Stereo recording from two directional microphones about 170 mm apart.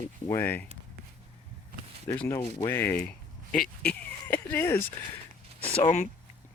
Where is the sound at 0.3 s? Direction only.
10° left (ahead or behind).